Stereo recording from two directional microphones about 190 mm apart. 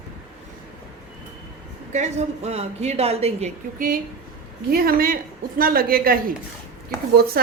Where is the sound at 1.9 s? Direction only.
35° right (ahead or behind).